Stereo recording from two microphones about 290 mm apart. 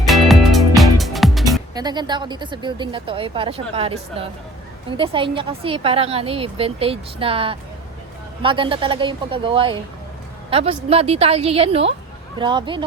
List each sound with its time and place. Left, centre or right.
0.0 s music: centre
1.7 s a woman's voice: centre